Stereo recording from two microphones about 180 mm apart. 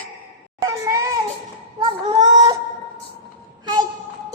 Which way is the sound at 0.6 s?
20° right (ahead or behind).